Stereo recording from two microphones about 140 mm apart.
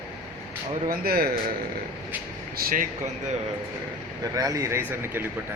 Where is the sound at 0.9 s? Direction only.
90° right.